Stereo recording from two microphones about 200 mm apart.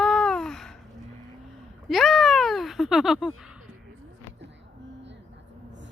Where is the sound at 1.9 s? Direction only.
Centre (ahead or behind).